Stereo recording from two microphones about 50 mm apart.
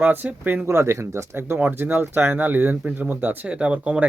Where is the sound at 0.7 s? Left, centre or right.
Right.